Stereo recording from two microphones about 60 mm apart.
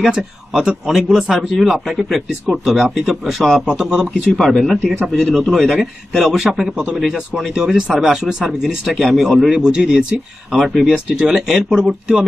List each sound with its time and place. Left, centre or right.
0.0 s speech: centre
4.3 s speech: centre
10.5 s speech: centre